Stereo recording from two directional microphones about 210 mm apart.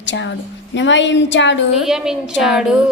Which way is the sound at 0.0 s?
60° left (ahead or behind).